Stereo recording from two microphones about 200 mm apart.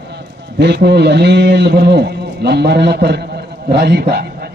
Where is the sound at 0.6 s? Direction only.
55° right (ahead or behind).